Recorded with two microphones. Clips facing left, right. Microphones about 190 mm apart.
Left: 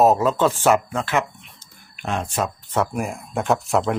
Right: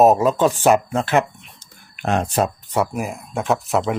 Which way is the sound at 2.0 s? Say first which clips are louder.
Right 5 dB; 45° right (ahead or behind).